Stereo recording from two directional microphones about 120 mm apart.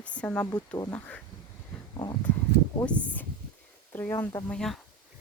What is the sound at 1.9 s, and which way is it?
Speech, 35° left (ahead or behind).